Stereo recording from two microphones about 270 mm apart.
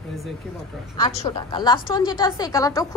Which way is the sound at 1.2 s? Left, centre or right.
Centre.